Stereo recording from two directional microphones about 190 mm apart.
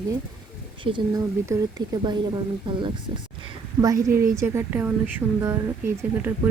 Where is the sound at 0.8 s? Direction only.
25° right (ahead or behind).